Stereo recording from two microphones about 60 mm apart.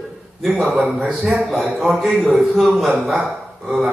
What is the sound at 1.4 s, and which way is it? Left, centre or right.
A man's voice, centre.